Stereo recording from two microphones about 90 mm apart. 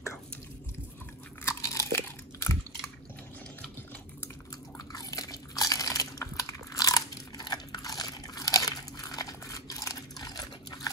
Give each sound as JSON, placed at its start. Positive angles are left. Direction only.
{"t": 1.5, "sound": "crunch", "side_deg": 35}
{"t": 4.7, "sound": "crunch", "side_deg": 45}